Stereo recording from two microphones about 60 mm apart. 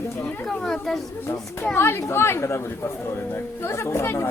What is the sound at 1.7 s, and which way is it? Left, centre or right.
Speech, left.